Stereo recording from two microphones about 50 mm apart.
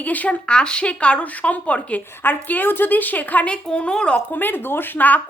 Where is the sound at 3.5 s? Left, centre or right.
Left.